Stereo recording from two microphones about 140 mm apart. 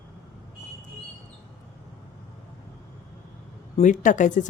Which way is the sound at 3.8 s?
65° left (ahead or behind).